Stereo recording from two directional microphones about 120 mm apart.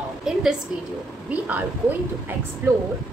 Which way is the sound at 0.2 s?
5° right (ahead or behind).